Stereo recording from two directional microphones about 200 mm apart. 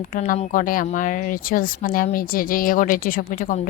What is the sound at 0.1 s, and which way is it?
A woman's voice, 40° left (ahead or behind).